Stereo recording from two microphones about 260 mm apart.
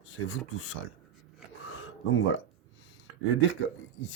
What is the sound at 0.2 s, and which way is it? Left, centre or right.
Speech, left.